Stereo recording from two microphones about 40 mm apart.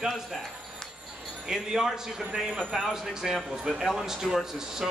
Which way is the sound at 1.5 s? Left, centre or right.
Centre.